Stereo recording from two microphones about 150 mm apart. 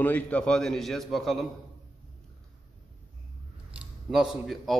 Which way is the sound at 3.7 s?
5° right (ahead or behind).